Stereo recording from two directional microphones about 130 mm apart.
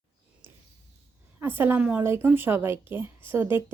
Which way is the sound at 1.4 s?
15° right (ahead or behind).